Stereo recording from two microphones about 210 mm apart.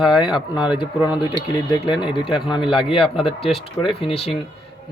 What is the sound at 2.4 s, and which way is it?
Speech, 25° left (ahead or behind).